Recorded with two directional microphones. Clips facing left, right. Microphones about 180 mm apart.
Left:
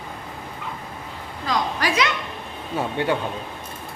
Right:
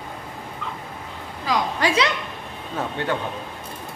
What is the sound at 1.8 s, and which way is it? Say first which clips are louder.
Speech: right 3 dB; 30° right (ahead or behind).